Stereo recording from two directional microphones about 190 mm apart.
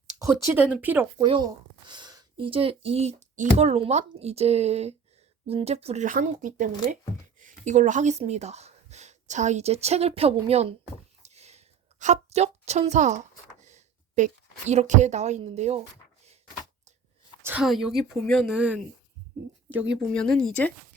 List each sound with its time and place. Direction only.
0.2 s speech: 15° right (ahead or behind)
1.2 s speech: 20° right (ahead or behind)
11.2 s a sound: 35° right (ahead or behind)
14.7 s speech: 35° right (ahead or behind)
17.4 s speech: 5° right (ahead or behind)
19.9 s speech: 5° left (ahead or behind)